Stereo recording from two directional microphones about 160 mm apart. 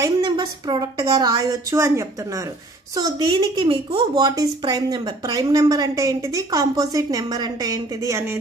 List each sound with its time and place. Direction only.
0.0 s a woman's voice: 25° right (ahead or behind)